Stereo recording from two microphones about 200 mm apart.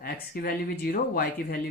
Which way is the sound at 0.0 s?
50° left (ahead or behind).